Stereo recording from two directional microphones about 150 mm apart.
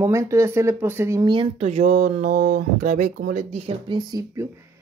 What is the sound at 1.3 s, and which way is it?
Speech, 40° right (ahead or behind).